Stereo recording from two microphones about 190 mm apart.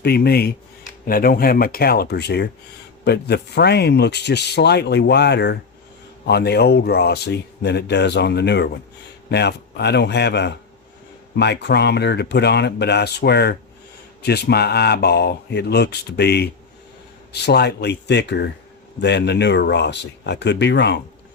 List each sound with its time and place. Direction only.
0.0 s speech: 55° left (ahead or behind)